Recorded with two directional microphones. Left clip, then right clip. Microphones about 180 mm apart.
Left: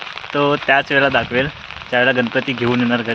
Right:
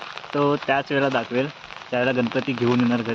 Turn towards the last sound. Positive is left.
turn(degrees=10)  # may be behind; listen again after turning